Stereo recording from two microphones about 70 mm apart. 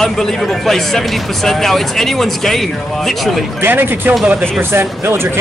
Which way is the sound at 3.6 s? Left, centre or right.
Right.